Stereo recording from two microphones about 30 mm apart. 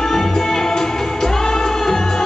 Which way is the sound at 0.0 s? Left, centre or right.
Centre.